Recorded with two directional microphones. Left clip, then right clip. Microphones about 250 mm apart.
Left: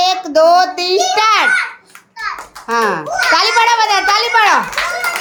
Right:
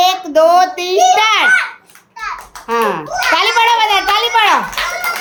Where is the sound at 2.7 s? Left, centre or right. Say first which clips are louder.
Left 1 dB; centre.